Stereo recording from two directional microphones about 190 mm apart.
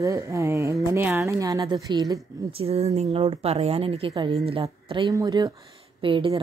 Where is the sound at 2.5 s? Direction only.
30° right (ahead or behind).